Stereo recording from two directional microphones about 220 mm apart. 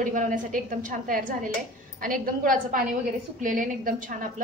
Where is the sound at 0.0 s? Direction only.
35° right (ahead or behind).